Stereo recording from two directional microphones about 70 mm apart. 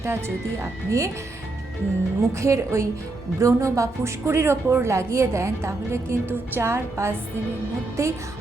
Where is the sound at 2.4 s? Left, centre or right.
Right.